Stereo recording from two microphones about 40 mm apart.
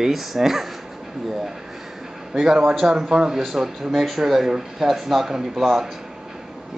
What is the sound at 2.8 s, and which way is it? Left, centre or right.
Speech, centre.